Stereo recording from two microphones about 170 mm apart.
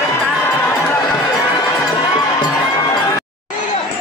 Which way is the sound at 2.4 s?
20° left (ahead or behind).